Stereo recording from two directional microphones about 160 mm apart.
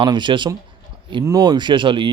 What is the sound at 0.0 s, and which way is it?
Speech, 30° right (ahead or behind).